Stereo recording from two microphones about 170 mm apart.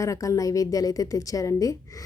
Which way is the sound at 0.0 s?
20° left (ahead or behind).